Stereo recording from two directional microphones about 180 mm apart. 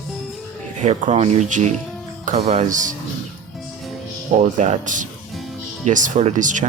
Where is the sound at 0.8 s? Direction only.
40° right (ahead or behind).